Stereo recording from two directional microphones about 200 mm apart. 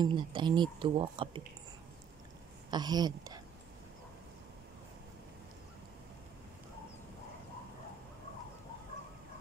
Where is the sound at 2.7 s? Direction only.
20° right (ahead or behind).